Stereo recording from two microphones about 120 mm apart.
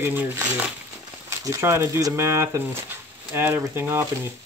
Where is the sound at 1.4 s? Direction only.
25° right (ahead or behind).